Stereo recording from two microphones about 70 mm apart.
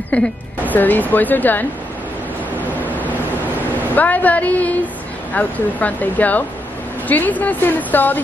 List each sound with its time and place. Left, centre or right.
0.1 s a woman's voice: left
3.9 s a woman's voice: left